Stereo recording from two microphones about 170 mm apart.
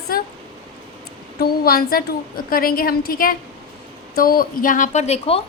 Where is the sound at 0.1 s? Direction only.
60° left (ahead or behind).